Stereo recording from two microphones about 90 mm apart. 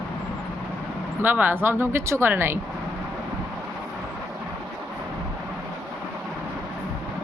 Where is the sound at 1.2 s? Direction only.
20° right (ahead or behind).